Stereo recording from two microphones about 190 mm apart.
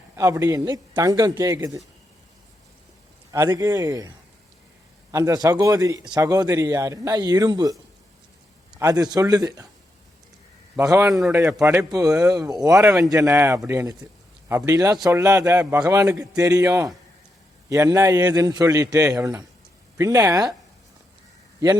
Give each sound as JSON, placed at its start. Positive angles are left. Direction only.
{"t": 0.2, "sound": "a man's voice", "side_deg": -15}
{"t": 3.3, "sound": "a man's voice", "side_deg": -15}
{"t": 5.1, "sound": "a man's voice", "side_deg": -20}
{"t": 8.8, "sound": "a man's voice", "side_deg": -20}
{"t": 10.8, "sound": "a man's voice", "side_deg": -15}
{"t": 11.1, "sound": "a man's voice", "side_deg": 0}
{"t": 11.6, "sound": "a man's voice", "side_deg": -15}